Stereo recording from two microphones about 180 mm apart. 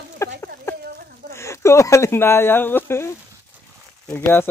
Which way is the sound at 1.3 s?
15° left (ahead or behind).